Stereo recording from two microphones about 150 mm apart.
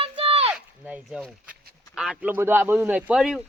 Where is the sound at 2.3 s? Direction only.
15° right (ahead or behind).